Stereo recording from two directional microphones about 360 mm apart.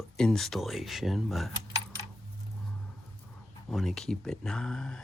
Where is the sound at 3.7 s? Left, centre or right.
Centre.